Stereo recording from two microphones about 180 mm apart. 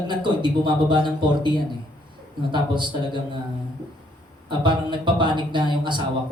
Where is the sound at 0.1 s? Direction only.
25° right (ahead or behind).